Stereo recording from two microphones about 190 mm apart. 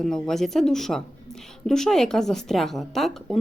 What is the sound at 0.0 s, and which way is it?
A woman's voice, centre (ahead or behind).